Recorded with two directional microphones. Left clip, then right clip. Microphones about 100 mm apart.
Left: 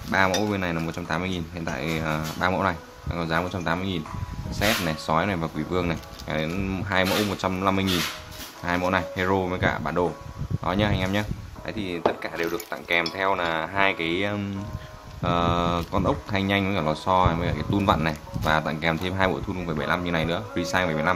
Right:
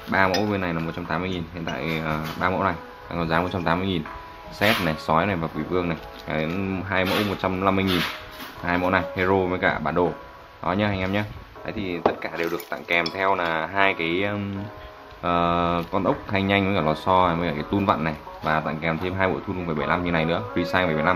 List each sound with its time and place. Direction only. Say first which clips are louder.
0.4 s speech: right 1 dB; 25° left (ahead or behind)
3.1 s speech: right 2 dB; 10° left (ahead or behind)
5.4 s speech: right 1 dB; 35° left (ahead or behind)
6.2 s speech: right 2 dB; 20° left (ahead or behind)
17.7 s speech: even; 30° left (ahead or behind); by 21.1 s 15° left (ahead or behind)